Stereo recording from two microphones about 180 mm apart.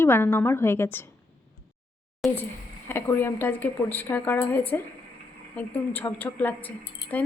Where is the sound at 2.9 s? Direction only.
10° left (ahead or behind).